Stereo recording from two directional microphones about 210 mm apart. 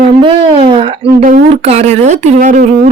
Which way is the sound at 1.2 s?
40° right (ahead or behind).